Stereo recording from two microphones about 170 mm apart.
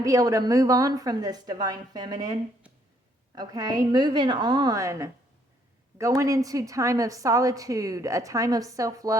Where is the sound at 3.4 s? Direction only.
20° right (ahead or behind).